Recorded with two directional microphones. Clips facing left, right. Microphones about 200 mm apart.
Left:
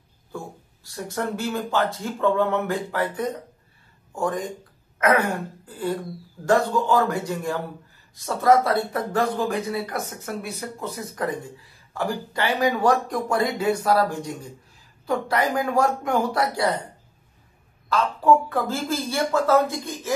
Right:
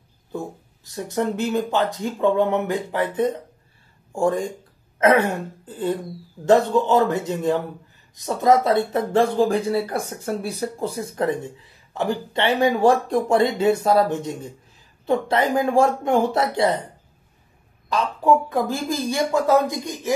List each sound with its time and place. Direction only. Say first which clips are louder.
0.8 s speech: right 4 dB; 20° right (ahead or behind)
4.9 s throat clearing: right 4 dB; 25° right (ahead or behind)
6.4 s speech: right 4 dB; 25° right (ahead or behind)
17.8 s speech: even; 15° right (ahead or behind)